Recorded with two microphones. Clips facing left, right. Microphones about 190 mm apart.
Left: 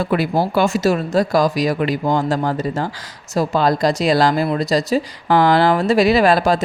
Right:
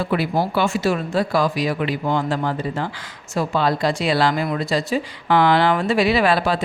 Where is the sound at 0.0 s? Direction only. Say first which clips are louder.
Left 3 dB; 45° left (ahead or behind).